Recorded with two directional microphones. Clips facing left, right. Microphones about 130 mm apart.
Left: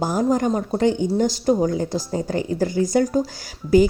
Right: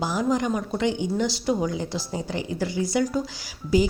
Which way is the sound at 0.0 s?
45° left (ahead or behind).